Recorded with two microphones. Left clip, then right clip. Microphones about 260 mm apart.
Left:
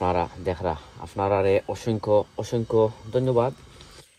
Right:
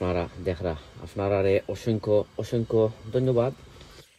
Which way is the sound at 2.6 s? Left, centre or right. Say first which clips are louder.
Left 2 dB; left.